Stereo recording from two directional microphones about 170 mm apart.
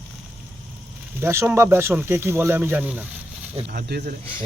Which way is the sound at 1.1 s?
15° right (ahead or behind).